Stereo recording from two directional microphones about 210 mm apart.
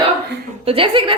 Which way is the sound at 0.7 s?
25° right (ahead or behind).